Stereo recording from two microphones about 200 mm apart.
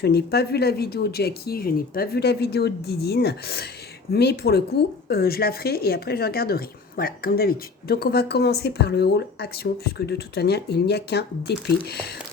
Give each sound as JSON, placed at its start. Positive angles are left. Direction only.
{"t": 0.0, "sound": "a woman's voice", "side_deg": 55}